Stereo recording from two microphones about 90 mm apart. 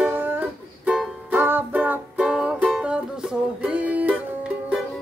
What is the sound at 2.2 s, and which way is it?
Music, 5° right (ahead or behind).